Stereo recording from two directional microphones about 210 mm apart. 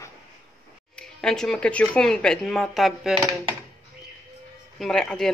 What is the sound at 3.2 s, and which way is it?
Speech, 20° right (ahead or behind).